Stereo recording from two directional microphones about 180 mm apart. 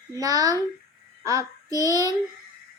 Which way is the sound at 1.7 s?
20° right (ahead or behind).